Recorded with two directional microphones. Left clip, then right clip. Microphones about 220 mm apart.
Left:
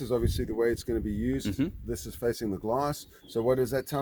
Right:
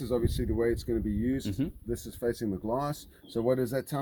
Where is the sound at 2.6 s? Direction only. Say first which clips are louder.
Left 4 dB; 30° left (ahead or behind).